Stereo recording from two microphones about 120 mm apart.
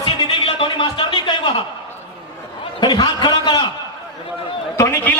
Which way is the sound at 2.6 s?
40° left (ahead or behind).